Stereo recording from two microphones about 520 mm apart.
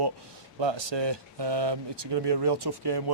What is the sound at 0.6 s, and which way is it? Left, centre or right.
Speech, right.